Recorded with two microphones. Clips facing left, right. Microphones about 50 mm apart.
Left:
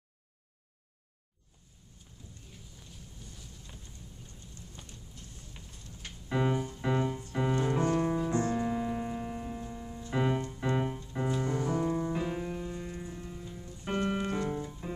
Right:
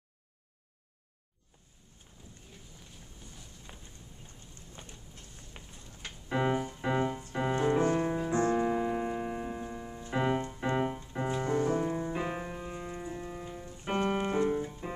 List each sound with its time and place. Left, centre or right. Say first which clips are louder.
2.2 s vehicle: even; right
4.8 s vehicle: right 4 dB; right
5.5 s a sound: right 4 dB; right
6.2 s music: even; centre
6.5 s music: right 1 dB; right
6.8 s piano: even; centre
8.4 s piano: right 3 dB; right
11.2 s music: right 2 dB; right